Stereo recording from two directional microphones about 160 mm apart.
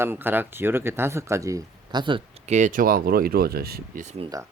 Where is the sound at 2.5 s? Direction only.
50° right (ahead or behind); by 4.0 s 75° right (ahead or behind).